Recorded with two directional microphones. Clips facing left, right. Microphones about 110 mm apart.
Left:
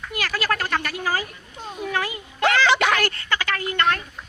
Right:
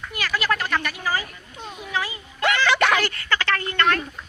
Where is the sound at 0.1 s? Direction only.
45° left (ahead or behind).